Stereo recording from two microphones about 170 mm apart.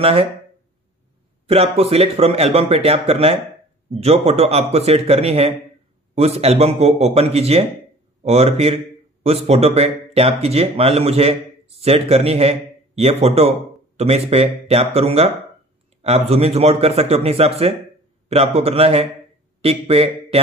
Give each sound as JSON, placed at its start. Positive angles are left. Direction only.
{"t": 0.0, "sound": "speech", "side_deg": -35}
{"t": 1.5, "sound": "speech", "side_deg": -35}